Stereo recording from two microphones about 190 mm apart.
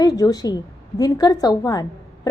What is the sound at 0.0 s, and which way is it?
A woman's voice, 20° left (ahead or behind).